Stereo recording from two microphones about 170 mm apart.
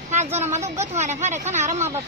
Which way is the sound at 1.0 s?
40° right (ahead or behind).